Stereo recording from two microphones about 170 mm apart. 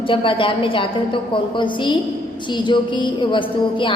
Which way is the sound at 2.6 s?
30° left (ahead or behind).